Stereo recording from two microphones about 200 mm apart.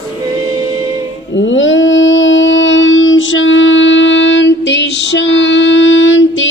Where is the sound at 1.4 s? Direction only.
70° left (ahead or behind).